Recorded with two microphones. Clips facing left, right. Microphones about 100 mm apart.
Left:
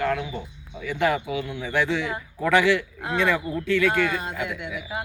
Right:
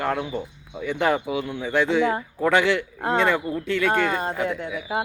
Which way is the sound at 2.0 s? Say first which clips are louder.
Right 7 dB; 40° right (ahead or behind).